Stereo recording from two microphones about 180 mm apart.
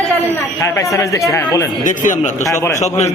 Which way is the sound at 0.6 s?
15° left (ahead or behind).